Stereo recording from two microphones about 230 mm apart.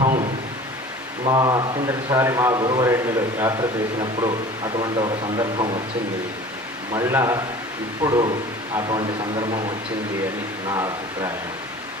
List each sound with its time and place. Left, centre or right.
1.2 s a man's voice: centre
6.9 s a man's voice: centre